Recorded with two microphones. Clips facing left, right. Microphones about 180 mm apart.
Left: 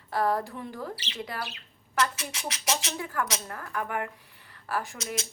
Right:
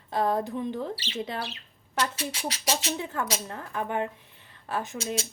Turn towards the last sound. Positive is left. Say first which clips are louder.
# right 2 dB
turn(degrees=-20)  # may be behind; listen again after turning